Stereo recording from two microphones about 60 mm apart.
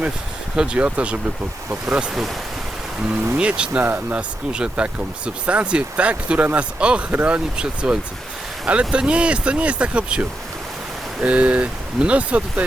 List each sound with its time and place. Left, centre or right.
0.5 s speech: centre
3.3 s speech: centre
4.5 s speech: centre